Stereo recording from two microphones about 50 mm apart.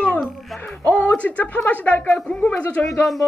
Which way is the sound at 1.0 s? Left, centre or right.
Left.